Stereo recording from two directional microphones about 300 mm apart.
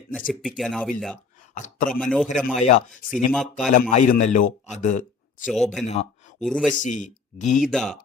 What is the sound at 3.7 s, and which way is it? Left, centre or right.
A man's voice, left.